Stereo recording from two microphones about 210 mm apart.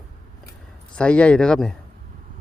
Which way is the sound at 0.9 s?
5° left (ahead or behind).